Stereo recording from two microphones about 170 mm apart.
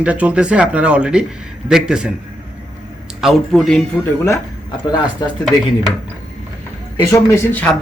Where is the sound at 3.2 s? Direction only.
5° left (ahead or behind).